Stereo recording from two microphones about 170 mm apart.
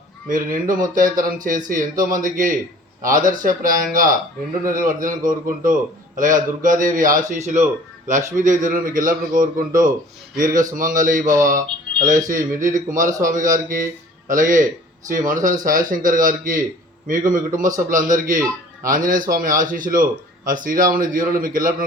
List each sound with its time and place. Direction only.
0.3 s speech: 50° right (ahead or behind)
12.3 s speech: 50° right (ahead or behind)